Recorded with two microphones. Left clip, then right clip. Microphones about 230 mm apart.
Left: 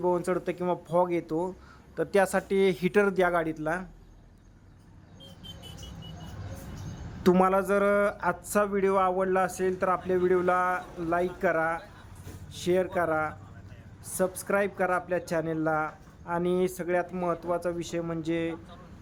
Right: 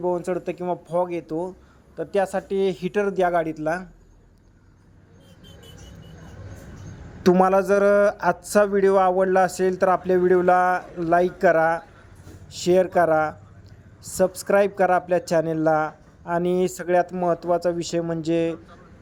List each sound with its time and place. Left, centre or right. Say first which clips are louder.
0.0 s speech: right 3 dB; centre
7.2 s speech: right 6 dB; centre